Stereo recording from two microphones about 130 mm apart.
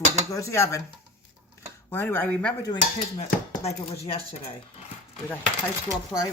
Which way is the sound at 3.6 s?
50° left (ahead or behind).